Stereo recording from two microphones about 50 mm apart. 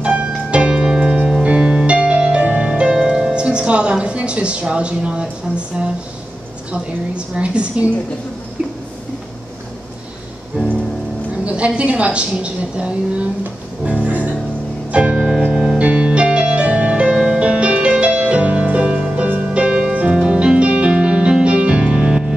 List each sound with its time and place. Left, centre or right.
0.0 s keyboard: right
1.4 s music: right
6.7 s a woman's voice: right
10.6 s music: right
11.4 s a woman's voice: right
13.8 s music: right; by 15.8 s centre
15.8 s music: right